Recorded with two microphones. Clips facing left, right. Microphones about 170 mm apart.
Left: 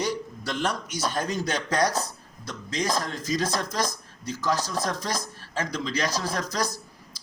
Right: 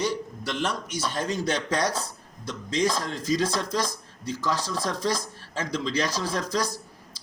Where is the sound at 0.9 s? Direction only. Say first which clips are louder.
Even; 45° left (ahead or behind).